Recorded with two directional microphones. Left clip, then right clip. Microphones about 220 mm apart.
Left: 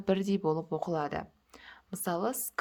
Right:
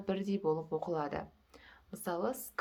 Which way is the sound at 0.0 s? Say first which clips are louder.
Left 5 dB; 40° left (ahead or behind).